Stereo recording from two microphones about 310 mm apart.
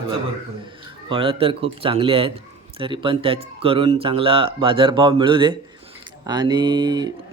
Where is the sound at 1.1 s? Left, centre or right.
Centre.